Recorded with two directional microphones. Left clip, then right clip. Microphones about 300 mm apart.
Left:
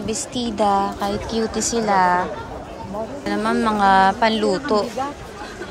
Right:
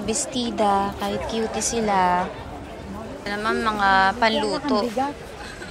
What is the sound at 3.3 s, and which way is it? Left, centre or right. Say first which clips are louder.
Speech: left 2 dB; centre.